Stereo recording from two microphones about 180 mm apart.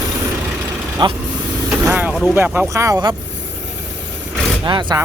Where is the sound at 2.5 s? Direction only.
15° right (ahead or behind).